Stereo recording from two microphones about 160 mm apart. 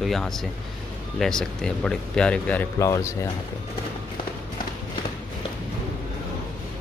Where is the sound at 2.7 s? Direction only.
20° left (ahead or behind).